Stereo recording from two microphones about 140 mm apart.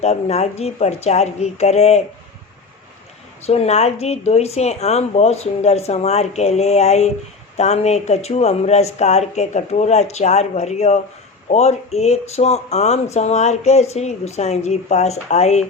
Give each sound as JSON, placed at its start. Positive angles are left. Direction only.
{"t": 0.0, "sound": "speech", "side_deg": 50}
{"t": 3.4, "sound": "speech", "side_deg": 50}